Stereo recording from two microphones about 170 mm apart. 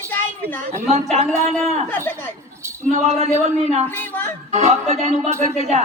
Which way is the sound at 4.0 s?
10° left (ahead or behind).